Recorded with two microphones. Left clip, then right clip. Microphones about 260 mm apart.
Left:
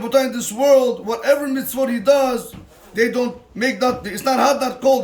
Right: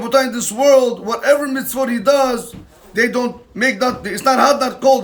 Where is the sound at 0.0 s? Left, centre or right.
Centre.